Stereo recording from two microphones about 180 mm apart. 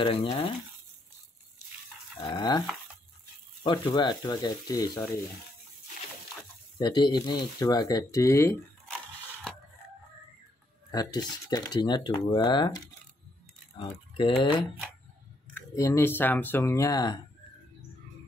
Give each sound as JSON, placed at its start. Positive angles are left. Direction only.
{"t": 0.0, "sound": "speech", "side_deg": 30}
{"t": 2.2, "sound": "speech", "side_deg": 25}
{"t": 3.6, "sound": "speech", "side_deg": 25}
{"t": 6.8, "sound": "speech", "side_deg": 25}
{"t": 10.9, "sound": "speech", "side_deg": 20}
{"t": 15.5, "sound": "speech", "side_deg": 15}